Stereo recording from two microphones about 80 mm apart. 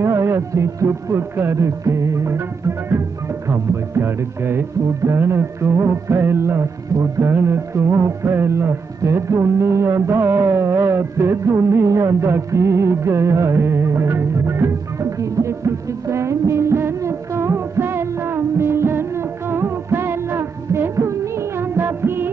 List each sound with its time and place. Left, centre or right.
0.0 s music: right
3.4 s music: right